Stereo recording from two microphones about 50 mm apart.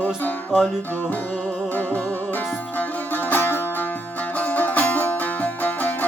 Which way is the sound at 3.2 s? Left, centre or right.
Left.